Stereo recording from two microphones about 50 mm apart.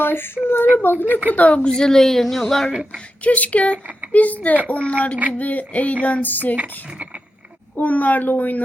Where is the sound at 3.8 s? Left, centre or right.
Right.